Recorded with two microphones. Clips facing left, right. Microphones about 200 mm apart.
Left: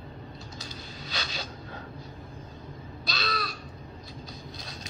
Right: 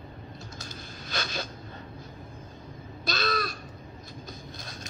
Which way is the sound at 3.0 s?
50° right (ahead or behind).